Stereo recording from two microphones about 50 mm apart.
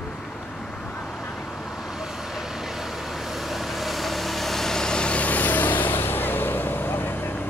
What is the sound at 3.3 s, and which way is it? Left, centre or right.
Vehicle, centre.